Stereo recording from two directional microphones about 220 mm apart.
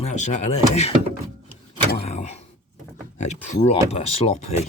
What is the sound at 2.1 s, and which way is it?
Door, 30° left (ahead or behind).